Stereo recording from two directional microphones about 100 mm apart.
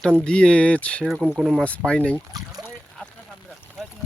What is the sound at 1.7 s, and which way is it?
Speech, 10° left (ahead or behind).